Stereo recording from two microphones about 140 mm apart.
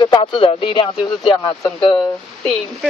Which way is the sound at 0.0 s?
35° left (ahead or behind).